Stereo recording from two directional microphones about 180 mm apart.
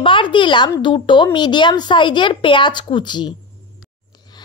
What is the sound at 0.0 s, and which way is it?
A child's voice, 25° left (ahead or behind).